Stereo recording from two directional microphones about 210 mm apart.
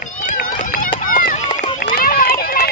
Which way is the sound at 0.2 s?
40° left (ahead or behind).